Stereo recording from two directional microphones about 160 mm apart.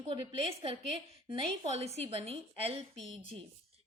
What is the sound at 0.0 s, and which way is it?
A woman's voice, 40° right (ahead or behind).